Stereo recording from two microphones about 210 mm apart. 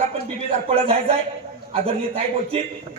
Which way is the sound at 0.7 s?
30° right (ahead or behind).